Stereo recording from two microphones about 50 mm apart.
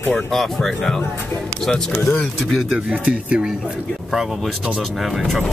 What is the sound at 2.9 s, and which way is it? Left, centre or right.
Speech, right.